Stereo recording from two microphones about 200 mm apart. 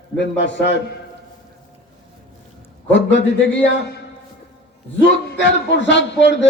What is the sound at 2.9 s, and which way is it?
Speech, 60° left (ahead or behind).